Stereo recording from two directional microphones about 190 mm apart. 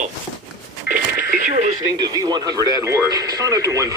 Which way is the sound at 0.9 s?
60° left (ahead or behind).